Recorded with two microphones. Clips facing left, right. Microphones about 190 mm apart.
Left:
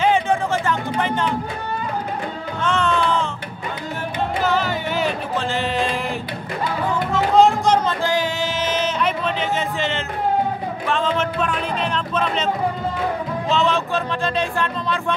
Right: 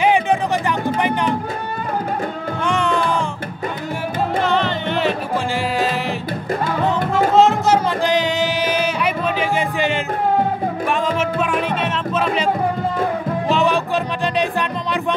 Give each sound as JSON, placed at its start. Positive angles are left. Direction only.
{"t": 0.0, "sound": "music", "side_deg": -15}
{"t": 2.6, "sound": "music", "side_deg": -15}
{"t": 4.4, "sound": "music", "side_deg": 5}
{"t": 7.3, "sound": "music", "side_deg": -5}
{"t": 8.0, "sound": "music", "side_deg": -20}
{"t": 10.9, "sound": "speech", "side_deg": -10}
{"t": 13.5, "sound": "music", "side_deg": -15}